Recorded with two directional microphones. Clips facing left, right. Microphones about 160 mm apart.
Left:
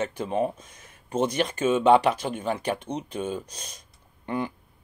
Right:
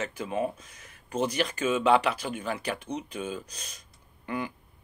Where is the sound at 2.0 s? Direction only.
50° left (ahead or behind).